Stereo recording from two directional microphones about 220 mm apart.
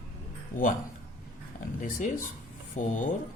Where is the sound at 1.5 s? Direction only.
40° left (ahead or behind).